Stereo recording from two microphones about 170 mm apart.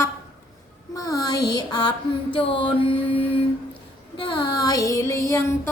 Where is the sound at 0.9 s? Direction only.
20° left (ahead or behind).